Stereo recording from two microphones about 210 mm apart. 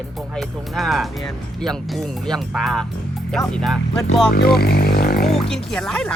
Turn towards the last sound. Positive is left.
turn(degrees=5)  # may be behind; listen again after turning